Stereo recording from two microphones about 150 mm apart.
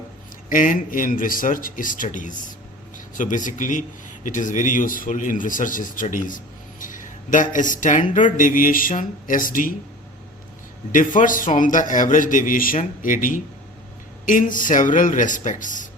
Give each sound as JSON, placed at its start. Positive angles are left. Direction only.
{"t": 0.5, "sound": "speech", "side_deg": 65}
{"t": 10.9, "sound": "speech", "side_deg": 60}